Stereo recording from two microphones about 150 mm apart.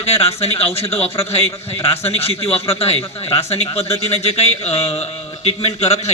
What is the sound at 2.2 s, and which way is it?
A man's voice, 40° left (ahead or behind).